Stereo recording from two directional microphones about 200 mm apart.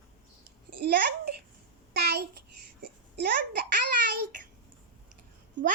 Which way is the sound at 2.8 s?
55° right (ahead or behind).